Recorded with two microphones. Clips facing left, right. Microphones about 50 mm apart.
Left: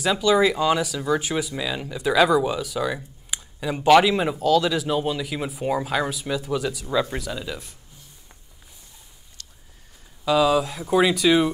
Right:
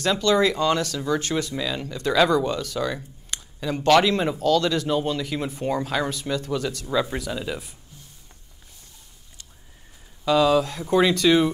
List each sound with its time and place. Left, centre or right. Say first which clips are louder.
0.0 s speech: left 1 dB; centre
9.4 s a sound: left 2 dB; centre
10.2 s speech: even; centre